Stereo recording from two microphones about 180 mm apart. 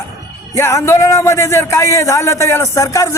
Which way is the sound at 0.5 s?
15° left (ahead or behind).